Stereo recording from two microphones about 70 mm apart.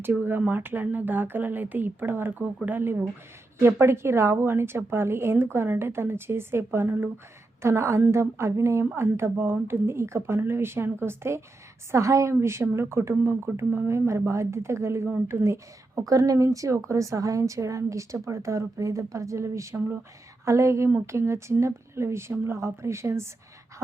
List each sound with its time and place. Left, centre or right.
0.0 s a woman's voice: right
7.6 s a woman's voice: right